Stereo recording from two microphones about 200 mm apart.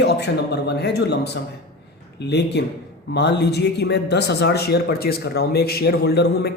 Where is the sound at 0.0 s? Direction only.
55° left (ahead or behind).